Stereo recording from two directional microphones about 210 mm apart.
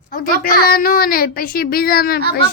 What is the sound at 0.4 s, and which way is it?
Speech, 45° left (ahead or behind).